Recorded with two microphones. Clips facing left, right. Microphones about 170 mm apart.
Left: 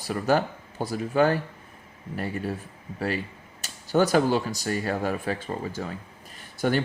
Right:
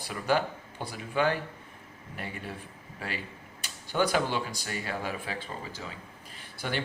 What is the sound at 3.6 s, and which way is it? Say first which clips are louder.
Speech: left 6 dB; 40° left (ahead or behind).